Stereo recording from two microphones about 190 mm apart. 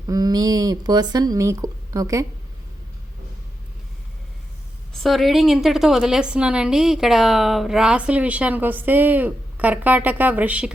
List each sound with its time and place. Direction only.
0.1 s speech: 20° right (ahead or behind)
5.0 s a woman's voice: centre (ahead or behind)